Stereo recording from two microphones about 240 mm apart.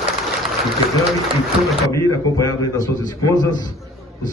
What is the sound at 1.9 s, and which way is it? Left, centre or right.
A man's voice, centre.